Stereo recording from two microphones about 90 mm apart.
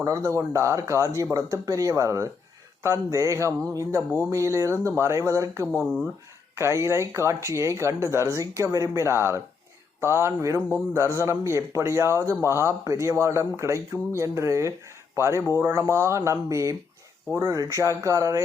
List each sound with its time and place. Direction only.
0.0 s speech: 35° right (ahead or behind)